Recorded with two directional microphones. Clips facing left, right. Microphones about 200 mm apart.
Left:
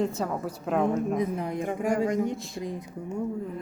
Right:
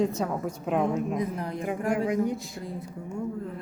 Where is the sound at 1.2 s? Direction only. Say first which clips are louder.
Left 2 dB; 20° left (ahead or behind).